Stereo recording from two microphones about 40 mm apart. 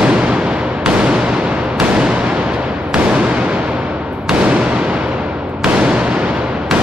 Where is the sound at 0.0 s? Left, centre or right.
Right.